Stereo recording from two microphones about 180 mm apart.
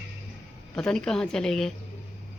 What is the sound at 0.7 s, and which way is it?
Speech, 5° left (ahead or behind).